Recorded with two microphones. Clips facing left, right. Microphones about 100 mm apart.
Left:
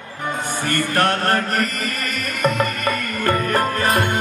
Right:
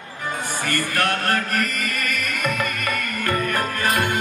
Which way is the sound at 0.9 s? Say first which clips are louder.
Left 4 dB; 35° left (ahead or behind).